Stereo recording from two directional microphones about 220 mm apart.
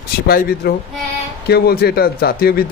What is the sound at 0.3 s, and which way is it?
A man's voice, 45° left (ahead or behind).